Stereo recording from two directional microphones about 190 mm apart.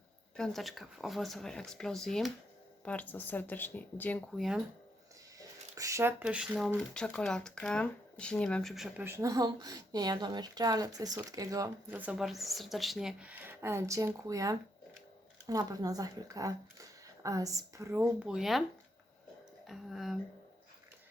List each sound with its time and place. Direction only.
0.3 s speech: centre (ahead or behind)
5.4 s speech: 15° right (ahead or behind); by 9.0 s centre (ahead or behind)
9.0 s speech: 15° right (ahead or behind)
19.6 s speech: centre (ahead or behind)